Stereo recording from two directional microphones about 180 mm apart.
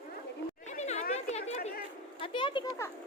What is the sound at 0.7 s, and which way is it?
Chatter, 40° left (ahead or behind).